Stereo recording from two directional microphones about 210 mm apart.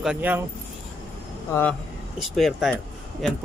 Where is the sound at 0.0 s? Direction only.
5° right (ahead or behind).